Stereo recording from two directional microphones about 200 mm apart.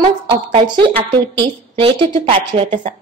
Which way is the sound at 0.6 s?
25° right (ahead or behind).